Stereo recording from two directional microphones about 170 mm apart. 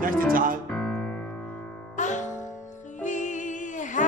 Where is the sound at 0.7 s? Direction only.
5° left (ahead or behind).